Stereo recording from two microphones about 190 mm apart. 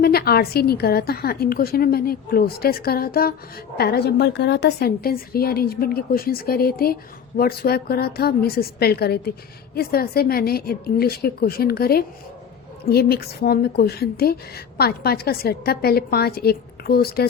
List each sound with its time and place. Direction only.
0.0 s a woman's voice: 55° left (ahead or behind)